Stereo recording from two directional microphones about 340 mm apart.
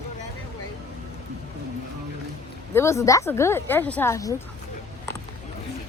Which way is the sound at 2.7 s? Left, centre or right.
Centre.